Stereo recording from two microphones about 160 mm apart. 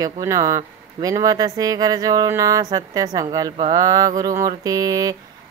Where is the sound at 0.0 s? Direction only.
20° right (ahead or behind).